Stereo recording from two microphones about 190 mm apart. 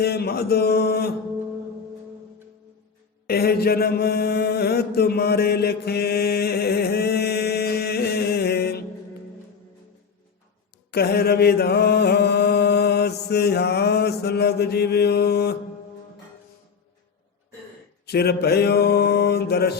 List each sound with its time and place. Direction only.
0.0 s mantra: 55° left (ahead or behind)
3.2 s mantra: 55° left (ahead or behind)
10.9 s mantra: 55° left (ahead or behind)
18.0 s mantra: 60° left (ahead or behind)